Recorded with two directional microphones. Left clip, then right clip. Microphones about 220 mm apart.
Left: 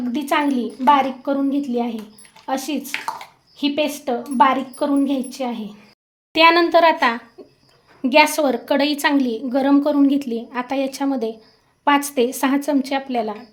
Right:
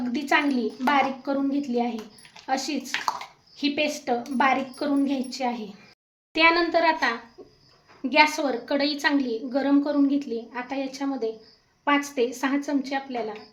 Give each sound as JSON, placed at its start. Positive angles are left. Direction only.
{"t": 0.1, "sound": "a woman's voice", "side_deg": 30}
{"t": 6.3, "sound": "a woman's voice", "side_deg": 45}